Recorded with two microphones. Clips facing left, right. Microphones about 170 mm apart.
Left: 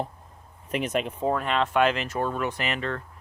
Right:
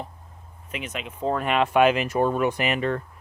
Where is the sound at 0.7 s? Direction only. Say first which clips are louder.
Left 7 dB; 45° left (ahead or behind).